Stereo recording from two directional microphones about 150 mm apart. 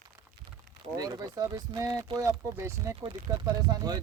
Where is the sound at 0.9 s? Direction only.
25° right (ahead or behind).